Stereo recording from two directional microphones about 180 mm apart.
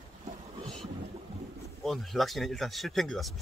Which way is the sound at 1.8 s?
Centre (ahead or behind).